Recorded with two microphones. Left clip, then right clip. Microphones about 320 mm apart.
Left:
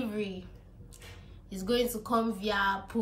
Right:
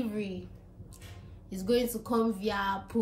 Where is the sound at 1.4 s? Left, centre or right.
Centre.